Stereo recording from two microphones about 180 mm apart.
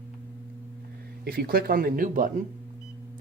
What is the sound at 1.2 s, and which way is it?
Speech, 55° right (ahead or behind).